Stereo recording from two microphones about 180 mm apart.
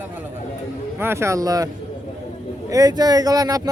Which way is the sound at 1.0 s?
15° right (ahead or behind).